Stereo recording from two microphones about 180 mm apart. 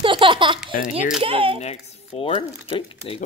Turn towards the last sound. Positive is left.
turn(degrees=30)  # may be behind; listen again after turning